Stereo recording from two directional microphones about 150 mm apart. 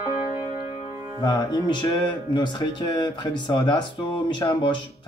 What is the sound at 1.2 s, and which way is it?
Speech, 25° left (ahead or behind).